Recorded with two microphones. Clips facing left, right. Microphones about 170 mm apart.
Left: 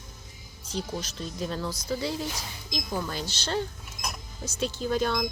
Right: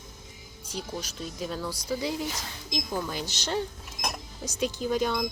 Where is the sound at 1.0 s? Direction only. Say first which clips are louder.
Left 1 dB; 5° right (ahead or behind).